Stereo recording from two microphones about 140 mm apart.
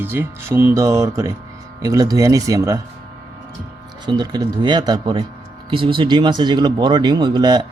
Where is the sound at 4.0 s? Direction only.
30° right (ahead or behind).